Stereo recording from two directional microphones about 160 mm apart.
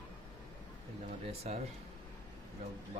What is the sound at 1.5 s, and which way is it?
Speech, 45° right (ahead or behind).